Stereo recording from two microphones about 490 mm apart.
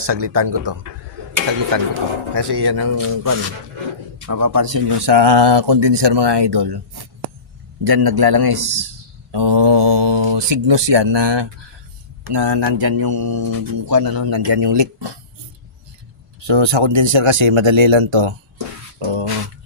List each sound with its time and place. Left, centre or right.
0.0 s a man's voice: right
4.9 s a man's voice: right
16.4 s a man's voice: right
19.0 s a sound: right